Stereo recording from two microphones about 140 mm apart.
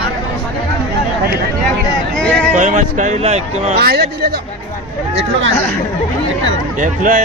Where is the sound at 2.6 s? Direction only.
60° right (ahead or behind).